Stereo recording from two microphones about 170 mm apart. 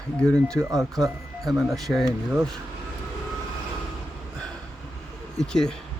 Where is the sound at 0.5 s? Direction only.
15° right (ahead or behind).